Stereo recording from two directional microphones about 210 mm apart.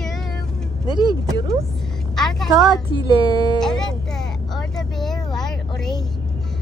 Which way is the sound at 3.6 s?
Centre (ahead or behind).